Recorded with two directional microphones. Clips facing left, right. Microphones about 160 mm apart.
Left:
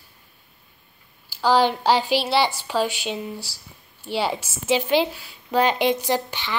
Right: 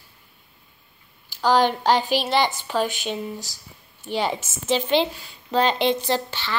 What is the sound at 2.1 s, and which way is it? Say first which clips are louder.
Speech: left 1 dB; 15° right (ahead or behind).